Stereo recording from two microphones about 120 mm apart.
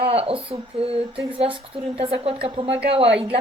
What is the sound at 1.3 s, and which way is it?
Speech, 50° right (ahead or behind).